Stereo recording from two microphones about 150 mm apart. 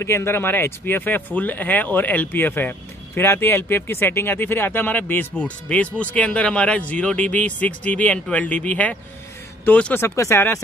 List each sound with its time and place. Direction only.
0.0 s speech: 15° left (ahead or behind)